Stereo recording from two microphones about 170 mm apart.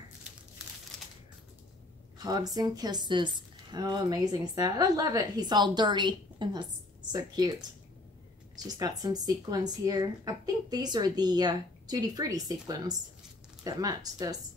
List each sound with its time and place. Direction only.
0.9 s a sound: centre (ahead or behind)
2.1 s speech: 20° right (ahead or behind)
8.6 s speech: 20° right (ahead or behind)